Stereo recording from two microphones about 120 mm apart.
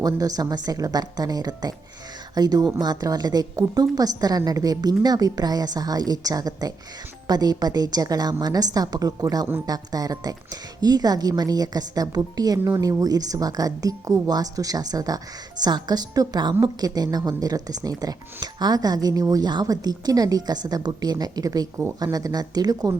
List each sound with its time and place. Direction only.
0.0 s a woman's voice: 30° right (ahead or behind)